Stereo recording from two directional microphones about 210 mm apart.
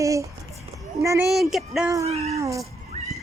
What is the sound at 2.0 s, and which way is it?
Speech, 30° right (ahead or behind).